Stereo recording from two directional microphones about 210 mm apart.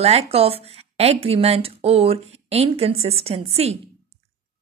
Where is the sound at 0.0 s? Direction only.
30° right (ahead or behind).